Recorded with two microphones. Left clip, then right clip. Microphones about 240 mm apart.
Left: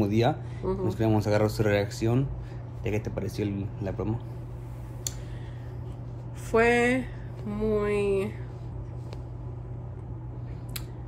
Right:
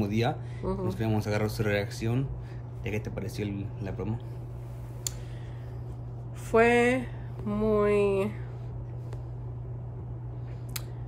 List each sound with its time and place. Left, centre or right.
0.0 s speech: centre
6.5 s speech: centre